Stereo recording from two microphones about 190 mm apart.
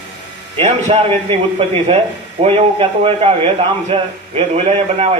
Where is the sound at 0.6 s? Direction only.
30° right (ahead or behind).